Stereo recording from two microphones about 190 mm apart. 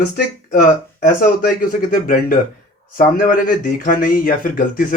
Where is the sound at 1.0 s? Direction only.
50° left (ahead or behind).